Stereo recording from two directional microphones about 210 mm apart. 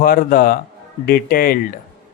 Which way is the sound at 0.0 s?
45° left (ahead or behind).